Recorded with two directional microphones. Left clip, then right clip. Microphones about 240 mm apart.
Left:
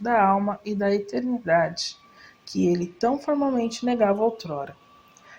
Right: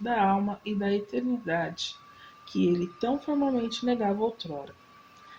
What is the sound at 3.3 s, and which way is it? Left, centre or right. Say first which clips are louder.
Speech: left 4 dB; left.